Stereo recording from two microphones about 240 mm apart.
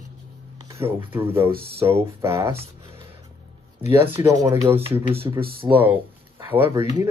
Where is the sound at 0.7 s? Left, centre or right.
Centre.